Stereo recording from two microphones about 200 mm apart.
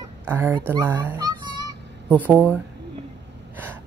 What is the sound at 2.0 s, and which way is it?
Speech, 10° right (ahead or behind).